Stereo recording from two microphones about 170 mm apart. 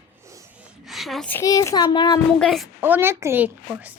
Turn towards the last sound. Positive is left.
turn(degrees=-10)  # may be behind; listen again after turning